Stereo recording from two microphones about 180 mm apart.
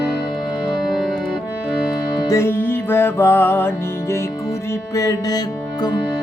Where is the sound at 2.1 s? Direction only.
20° left (ahead or behind).